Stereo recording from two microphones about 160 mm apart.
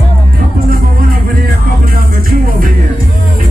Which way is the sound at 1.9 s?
65° right (ahead or behind).